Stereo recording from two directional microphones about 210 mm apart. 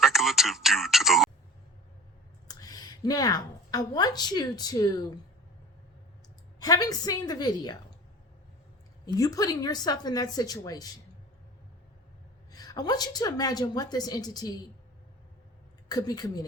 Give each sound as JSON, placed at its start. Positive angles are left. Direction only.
{"t": 0.0, "sound": "speech", "side_deg": 0}
{"t": 2.5, "sound": "a woman's voice", "side_deg": 15}
{"t": 6.6, "sound": "a woman's voice", "side_deg": 15}
{"t": 9.1, "sound": "a woman's voice", "side_deg": 15}
{"t": 12.5, "sound": "a woman's voice", "side_deg": 20}
{"t": 15.9, "sound": "a woman's voice", "side_deg": 20}